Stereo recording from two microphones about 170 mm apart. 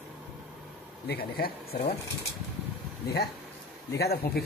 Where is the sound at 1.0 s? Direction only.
65° left (ahead or behind).